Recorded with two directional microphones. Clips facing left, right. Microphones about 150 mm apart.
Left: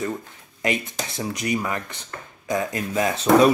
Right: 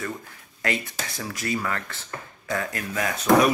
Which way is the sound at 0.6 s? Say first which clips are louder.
Left 3 dB; 20° left (ahead or behind).